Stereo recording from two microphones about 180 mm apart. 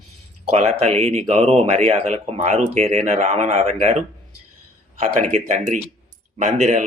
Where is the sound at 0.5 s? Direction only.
40° right (ahead or behind).